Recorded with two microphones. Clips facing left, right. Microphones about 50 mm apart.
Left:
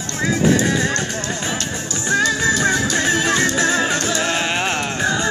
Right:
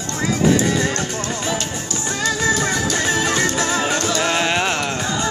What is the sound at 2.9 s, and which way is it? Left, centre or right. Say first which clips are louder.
Music: left 1 dB; centre.